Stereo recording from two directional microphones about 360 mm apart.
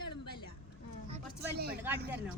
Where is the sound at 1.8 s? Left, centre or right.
Centre.